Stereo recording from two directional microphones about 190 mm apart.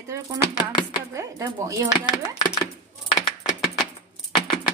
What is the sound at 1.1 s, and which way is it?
Speech, 15° right (ahead or behind).